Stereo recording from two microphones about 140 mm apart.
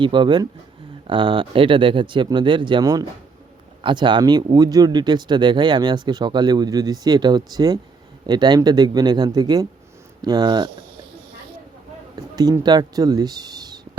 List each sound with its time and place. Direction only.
0.0 s speech: 35° right (ahead or behind)
12.1 s speech: 30° right (ahead or behind)